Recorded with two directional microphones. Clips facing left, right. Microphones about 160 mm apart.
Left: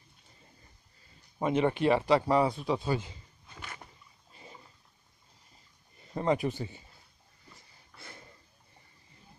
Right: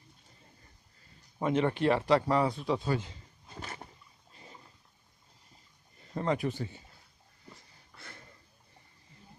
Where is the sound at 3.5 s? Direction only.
35° right (ahead or behind).